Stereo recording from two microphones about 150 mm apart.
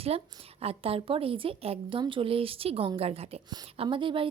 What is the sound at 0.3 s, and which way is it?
A woman's voice, 35° right (ahead or behind).